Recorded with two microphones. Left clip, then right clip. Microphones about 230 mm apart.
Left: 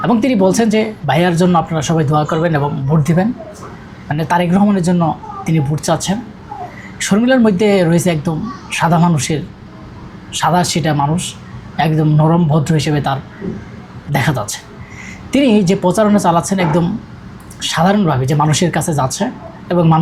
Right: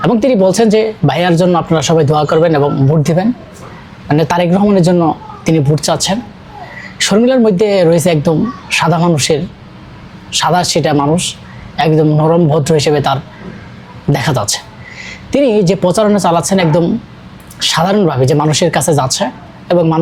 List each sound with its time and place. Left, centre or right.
0.0 s speech: right